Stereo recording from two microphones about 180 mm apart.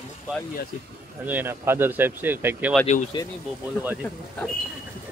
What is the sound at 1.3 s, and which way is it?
Speech, 10° right (ahead or behind).